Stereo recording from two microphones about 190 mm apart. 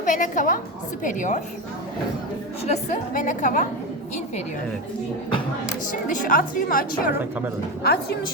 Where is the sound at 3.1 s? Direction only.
45° left (ahead or behind).